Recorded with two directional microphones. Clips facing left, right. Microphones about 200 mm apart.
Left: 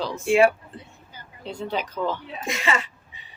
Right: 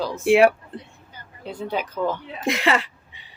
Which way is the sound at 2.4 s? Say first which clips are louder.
Right 5 dB; 60° right (ahead or behind).